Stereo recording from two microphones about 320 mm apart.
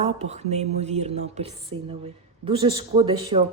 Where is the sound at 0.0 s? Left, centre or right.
Centre.